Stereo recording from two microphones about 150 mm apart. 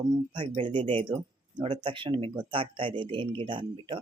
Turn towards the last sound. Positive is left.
turn(degrees=-35)  # may be behind; listen again after turning